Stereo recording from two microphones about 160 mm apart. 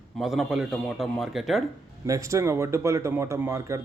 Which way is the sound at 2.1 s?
20° right (ahead or behind).